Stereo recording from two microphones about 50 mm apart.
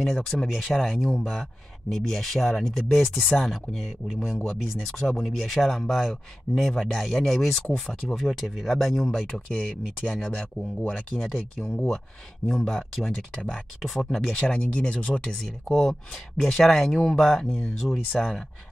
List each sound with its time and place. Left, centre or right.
0.0 s speech: centre
8.7 s speech: centre
14.3 s speech: centre
15.3 s speech: centre